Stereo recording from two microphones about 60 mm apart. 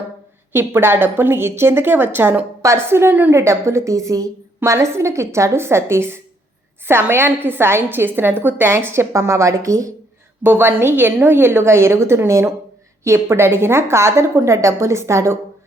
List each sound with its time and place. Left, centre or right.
0.5 s a woman's voice: right
2.6 s a woman's voice: right
3.3 s a woman's voice: right
10.4 s a woman's voice: right